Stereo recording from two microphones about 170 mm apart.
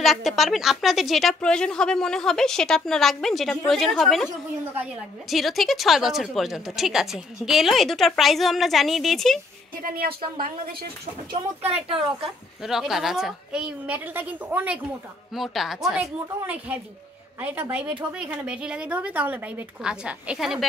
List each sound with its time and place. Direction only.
0.0 s a woman's voice: centre (ahead or behind)
5.3 s a woman's voice: centre (ahead or behind)
10.4 s a woman's voice: 60° right (ahead or behind)
11.6 s speech: 35° right (ahead or behind)
12.6 s a woman's voice: centre (ahead or behind)